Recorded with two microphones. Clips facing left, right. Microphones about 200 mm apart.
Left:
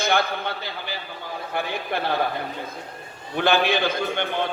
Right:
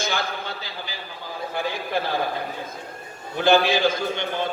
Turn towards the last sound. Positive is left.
turn(degrees=60)  # may be behind; listen again after turning